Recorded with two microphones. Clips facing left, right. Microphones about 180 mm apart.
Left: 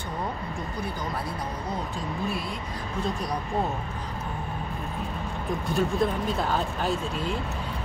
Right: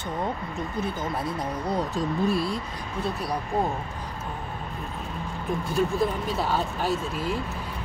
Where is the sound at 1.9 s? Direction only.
35° right (ahead or behind).